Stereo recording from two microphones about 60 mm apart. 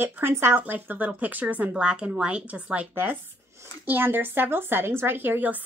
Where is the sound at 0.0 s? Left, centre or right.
Right.